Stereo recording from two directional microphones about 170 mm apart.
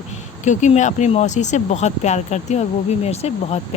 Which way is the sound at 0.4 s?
45° left (ahead or behind).